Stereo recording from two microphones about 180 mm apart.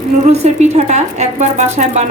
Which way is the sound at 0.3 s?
40° right (ahead or behind).